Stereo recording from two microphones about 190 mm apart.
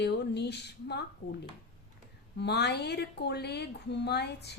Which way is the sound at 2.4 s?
60° left (ahead or behind).